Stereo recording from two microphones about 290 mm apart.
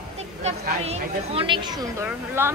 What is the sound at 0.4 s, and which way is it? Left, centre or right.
Speech, right.